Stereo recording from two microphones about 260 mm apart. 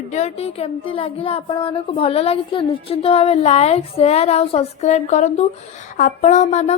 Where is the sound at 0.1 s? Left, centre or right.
Left.